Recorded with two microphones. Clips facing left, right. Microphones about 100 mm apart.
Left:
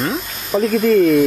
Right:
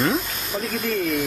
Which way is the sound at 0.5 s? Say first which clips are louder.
Left 12 dB; 90° left.